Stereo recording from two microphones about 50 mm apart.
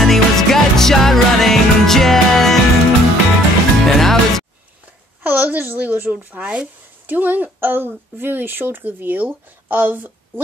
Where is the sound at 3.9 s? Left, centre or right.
Centre.